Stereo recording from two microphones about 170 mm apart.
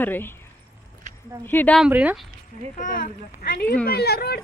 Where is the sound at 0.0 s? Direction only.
10° left (ahead or behind).